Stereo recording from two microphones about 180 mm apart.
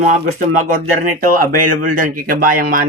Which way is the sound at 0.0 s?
45° right (ahead or behind).